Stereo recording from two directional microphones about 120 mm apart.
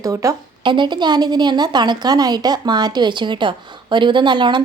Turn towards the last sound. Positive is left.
turn(degrees=-40)  # may be behind; listen again after turning